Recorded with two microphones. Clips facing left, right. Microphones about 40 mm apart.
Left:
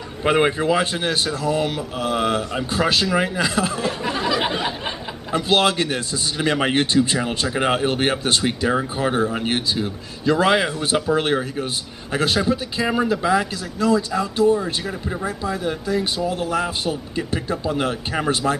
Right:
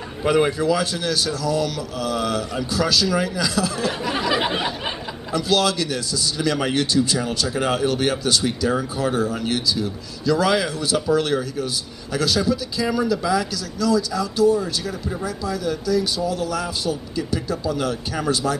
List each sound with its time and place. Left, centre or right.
0.2 s a man's voice: left
5.3 s a man's voice: left